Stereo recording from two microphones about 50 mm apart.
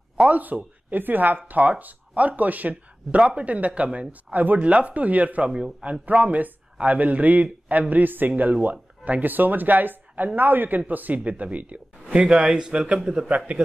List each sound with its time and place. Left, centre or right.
0.3 s speech: right
5.5 s speech: right
6.0 s a man's voice: right